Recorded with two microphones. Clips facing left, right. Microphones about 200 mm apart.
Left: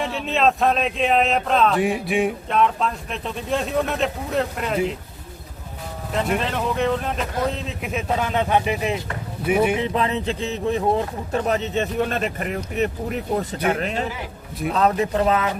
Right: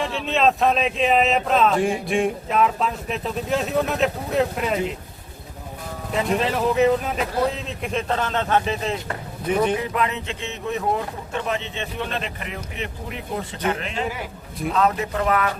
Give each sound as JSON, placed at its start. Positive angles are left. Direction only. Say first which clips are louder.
{"t": 0.0, "sound": "speech", "louder": "even", "side_deg": 0}
{"t": 6.1, "sound": "speech", "louder": "right 1 dB", "side_deg": 0}
{"t": 9.7, "sound": "speech", "louder": "left 2 dB", "side_deg": 25}